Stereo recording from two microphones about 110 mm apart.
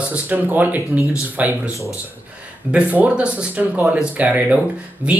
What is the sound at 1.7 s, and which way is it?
Speech, 30° left (ahead or behind).